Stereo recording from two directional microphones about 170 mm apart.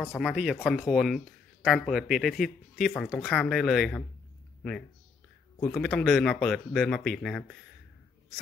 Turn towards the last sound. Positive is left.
turn(degrees=5)  # may be behind; listen again after turning